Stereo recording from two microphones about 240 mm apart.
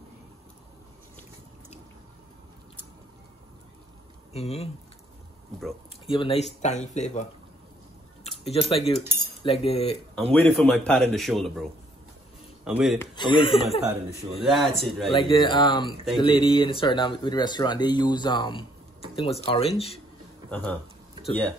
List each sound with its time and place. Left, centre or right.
4.3 s speech: left
6.0 s speech: left
10.1 s a man's voice: centre
13.0 s speech: centre
14.5 s a man's voice: centre
15.0 s speech: left
20.4 s speech: centre